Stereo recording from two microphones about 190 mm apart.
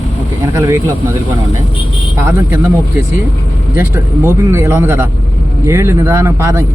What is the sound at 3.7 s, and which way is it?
Speech, 15° right (ahead or behind).